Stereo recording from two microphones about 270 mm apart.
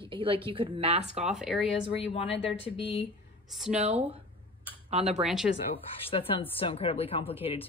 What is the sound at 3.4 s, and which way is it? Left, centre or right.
Speech, centre.